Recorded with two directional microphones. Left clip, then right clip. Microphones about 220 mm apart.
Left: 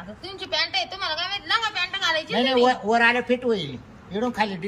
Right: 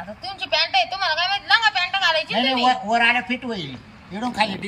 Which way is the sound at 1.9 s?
5° left (ahead or behind).